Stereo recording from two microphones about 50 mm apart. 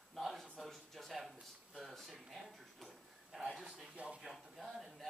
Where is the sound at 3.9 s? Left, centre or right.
Right.